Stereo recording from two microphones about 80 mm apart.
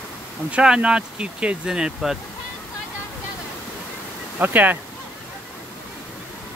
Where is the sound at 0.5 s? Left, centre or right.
Centre.